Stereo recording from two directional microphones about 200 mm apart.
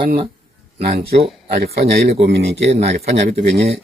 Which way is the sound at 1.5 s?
50° right (ahead or behind).